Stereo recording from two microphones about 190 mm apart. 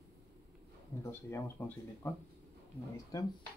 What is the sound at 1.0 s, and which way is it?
Speech, 10° left (ahead or behind).